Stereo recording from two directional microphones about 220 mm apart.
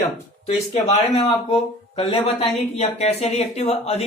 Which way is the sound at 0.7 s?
30° left (ahead or behind).